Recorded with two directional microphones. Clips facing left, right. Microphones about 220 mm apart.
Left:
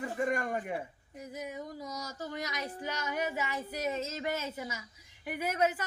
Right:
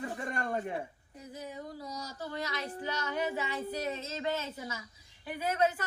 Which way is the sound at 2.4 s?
15° left (ahead or behind).